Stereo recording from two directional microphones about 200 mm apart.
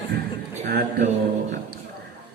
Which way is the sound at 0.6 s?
50° right (ahead or behind).